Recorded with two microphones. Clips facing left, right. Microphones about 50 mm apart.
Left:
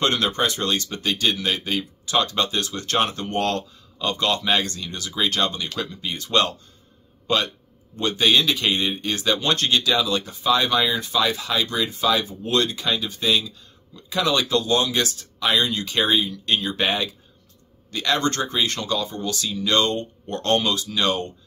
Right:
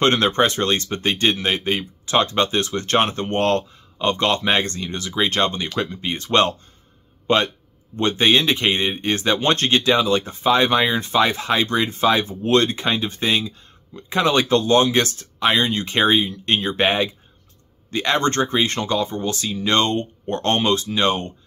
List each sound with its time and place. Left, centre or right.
0.0 s a man's voice: right